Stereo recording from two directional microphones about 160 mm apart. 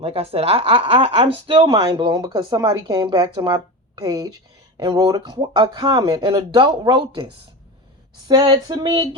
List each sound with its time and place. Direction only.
0.0 s speech: 35° right (ahead or behind)
8.3 s speech: 25° right (ahead or behind)